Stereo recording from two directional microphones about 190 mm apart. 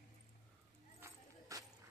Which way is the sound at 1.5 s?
15° right (ahead or behind).